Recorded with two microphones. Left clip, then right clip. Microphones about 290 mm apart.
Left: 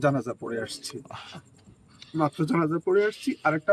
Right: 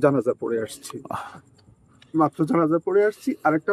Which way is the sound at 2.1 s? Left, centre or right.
Centre.